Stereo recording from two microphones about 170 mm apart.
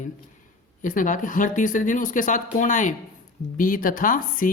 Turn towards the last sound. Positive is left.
turn(degrees=55)  # may be behind; listen again after turning